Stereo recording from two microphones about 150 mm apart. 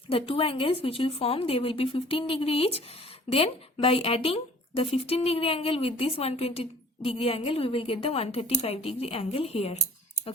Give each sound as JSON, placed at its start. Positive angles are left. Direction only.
{"t": 0.1, "sound": "a woman's voice", "side_deg": 40}